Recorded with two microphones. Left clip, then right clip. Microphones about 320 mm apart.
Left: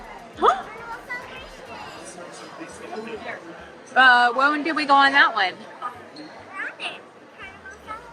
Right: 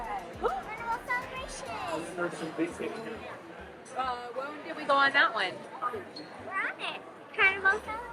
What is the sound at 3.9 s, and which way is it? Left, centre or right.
A man's voice, left.